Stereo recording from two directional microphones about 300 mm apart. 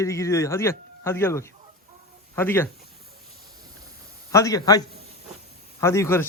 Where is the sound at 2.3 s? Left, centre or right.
Centre.